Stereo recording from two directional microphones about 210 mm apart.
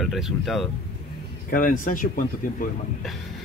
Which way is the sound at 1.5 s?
40° left (ahead or behind).